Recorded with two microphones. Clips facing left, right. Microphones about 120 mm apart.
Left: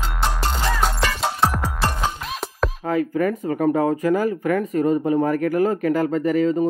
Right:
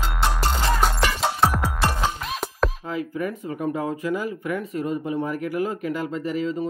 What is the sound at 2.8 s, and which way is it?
Speech, 50° left (ahead or behind).